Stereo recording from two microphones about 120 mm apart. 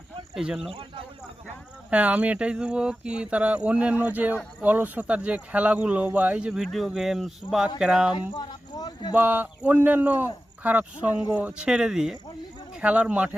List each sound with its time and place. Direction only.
0.3 s speech: 5° right (ahead or behind)
0.7 s speech: 50° right (ahead or behind)
1.9 s speech: 10° right (ahead or behind)
8.1 s a sound: 40° left (ahead or behind)
9.1 s speech: 15° right (ahead or behind)